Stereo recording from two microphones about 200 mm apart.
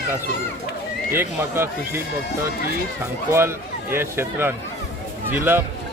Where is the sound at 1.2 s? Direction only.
10° right (ahead or behind).